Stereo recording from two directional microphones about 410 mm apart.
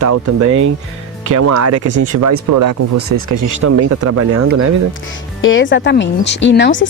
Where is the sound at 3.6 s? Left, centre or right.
Right.